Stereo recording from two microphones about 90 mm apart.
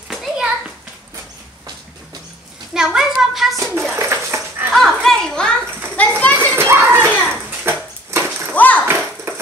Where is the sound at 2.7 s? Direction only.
5° right (ahead or behind).